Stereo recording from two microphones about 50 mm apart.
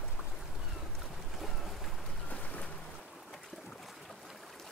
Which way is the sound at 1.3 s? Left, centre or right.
Centre.